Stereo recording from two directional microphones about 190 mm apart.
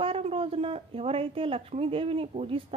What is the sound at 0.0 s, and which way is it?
A woman's voice, 30° right (ahead or behind).